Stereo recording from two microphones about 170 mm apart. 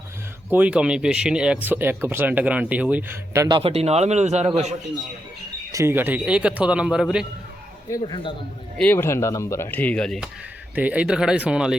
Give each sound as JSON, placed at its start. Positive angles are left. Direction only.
{"t": 0.5, "sound": "speech", "side_deg": -5}
{"t": 3.6, "sound": "speech", "side_deg": -35}
{"t": 5.7, "sound": "speech", "side_deg": -15}
{"t": 7.9, "sound": "speech", "side_deg": 25}
{"t": 8.8, "sound": "speech", "side_deg": 15}
{"t": 10.8, "sound": "speech", "side_deg": -10}